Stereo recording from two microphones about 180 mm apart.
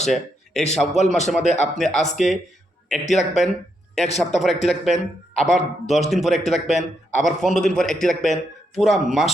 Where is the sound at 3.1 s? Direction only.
40° left (ahead or behind).